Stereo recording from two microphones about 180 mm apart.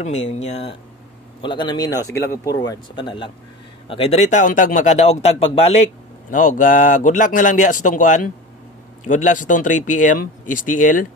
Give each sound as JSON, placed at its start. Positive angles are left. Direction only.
{"t": 0.0, "sound": "a man's voice", "side_deg": 35}
{"t": 6.3, "sound": "speech", "side_deg": 45}